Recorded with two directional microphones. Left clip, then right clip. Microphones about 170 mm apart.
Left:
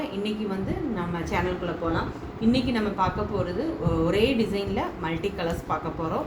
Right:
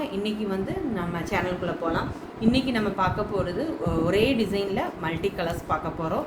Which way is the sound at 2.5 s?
35° right (ahead or behind).